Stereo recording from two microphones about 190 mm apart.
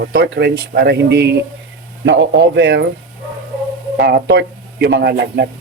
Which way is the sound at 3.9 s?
65° right (ahead or behind).